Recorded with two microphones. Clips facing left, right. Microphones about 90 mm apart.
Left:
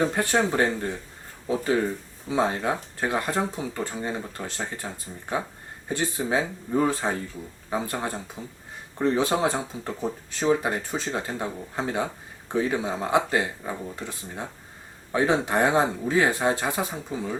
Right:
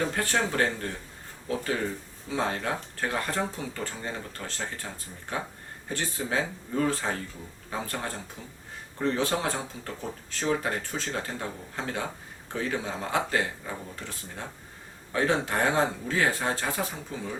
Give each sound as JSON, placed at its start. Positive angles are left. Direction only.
{"t": 0.0, "sound": "speech", "side_deg": 20}
{"t": 2.3, "sound": "speech", "side_deg": 20}
{"t": 5.9, "sound": "speech", "side_deg": 20}